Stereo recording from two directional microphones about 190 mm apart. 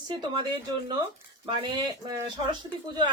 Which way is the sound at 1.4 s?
25° right (ahead or behind).